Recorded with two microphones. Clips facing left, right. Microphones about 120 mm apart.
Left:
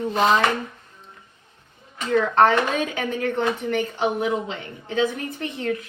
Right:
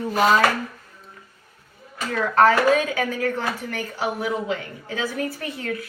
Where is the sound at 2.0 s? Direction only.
25° left (ahead or behind).